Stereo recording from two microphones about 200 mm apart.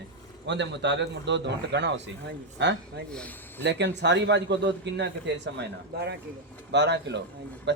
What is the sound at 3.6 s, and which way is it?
A man's voice, 60° right (ahead or behind).